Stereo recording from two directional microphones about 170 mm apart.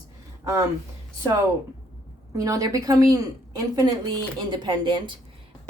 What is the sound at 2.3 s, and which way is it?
Speech, 20° right (ahead or behind).